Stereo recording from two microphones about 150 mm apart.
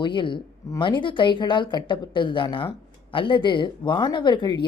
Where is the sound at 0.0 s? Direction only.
30° left (ahead or behind).